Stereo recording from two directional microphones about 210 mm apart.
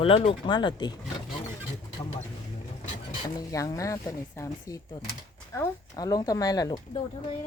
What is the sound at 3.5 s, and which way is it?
Speech, 15° left (ahead or behind).